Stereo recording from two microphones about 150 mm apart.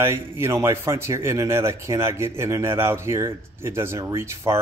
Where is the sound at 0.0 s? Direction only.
15° right (ahead or behind).